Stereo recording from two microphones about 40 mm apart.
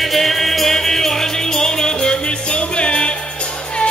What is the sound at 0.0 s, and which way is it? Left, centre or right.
Music, centre.